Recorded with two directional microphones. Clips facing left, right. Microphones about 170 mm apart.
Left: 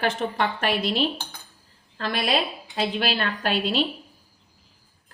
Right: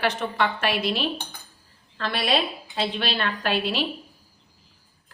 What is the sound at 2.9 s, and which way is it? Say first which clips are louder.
Speech: left 1 dB; 40° left (ahead or behind).